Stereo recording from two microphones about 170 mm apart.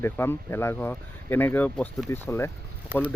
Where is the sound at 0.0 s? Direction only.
15° left (ahead or behind).